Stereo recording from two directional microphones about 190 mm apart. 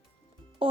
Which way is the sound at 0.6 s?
30° right (ahead or behind).